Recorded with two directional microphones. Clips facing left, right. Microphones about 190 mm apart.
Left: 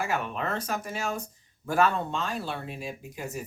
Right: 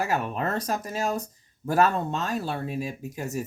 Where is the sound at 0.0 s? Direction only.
40° right (ahead or behind).